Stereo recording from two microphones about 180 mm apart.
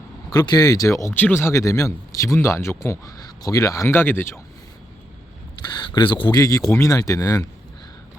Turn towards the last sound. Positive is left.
turn(degrees=20)  # may be behind; listen again after turning